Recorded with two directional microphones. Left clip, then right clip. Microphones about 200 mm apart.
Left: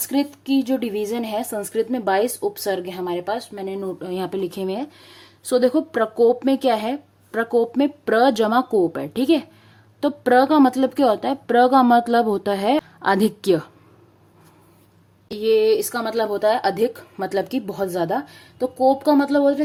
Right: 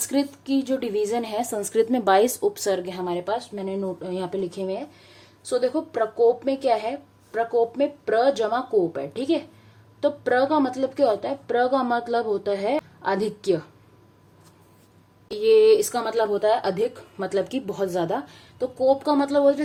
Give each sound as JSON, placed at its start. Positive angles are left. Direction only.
{"t": 0.0, "sound": "a woman's voice", "side_deg": 20}
{"t": 15.3, "sound": "speech", "side_deg": 25}
{"t": 17.5, "sound": "a woman's voice", "side_deg": 20}
{"t": 18.6, "sound": "speech", "side_deg": 40}